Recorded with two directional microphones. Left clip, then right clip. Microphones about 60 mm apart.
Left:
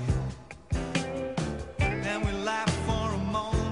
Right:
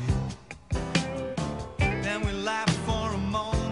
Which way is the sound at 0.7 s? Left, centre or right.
Left.